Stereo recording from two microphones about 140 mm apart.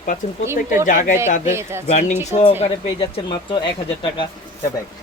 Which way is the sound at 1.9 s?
55° left (ahead or behind).